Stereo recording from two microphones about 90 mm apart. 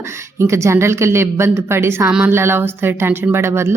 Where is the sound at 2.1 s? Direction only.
15° right (ahead or behind).